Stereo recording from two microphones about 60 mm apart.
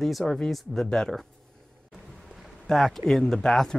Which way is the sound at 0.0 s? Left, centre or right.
Centre.